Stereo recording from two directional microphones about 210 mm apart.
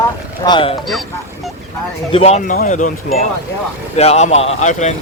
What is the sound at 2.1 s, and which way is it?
Speech, 30° left (ahead or behind).